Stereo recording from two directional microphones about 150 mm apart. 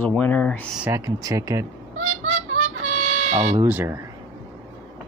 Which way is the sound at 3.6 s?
15° right (ahead or behind).